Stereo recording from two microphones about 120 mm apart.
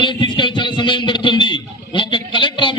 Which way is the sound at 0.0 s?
40° left (ahead or behind).